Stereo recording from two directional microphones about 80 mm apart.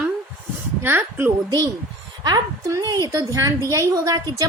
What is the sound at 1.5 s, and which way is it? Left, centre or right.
A woman's voice, right.